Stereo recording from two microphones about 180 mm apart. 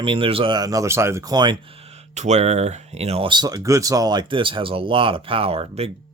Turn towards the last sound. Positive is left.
turn(degrees=-35)  # may be behind; listen again after turning